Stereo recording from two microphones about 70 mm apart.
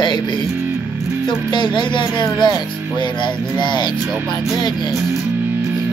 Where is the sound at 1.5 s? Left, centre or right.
Left.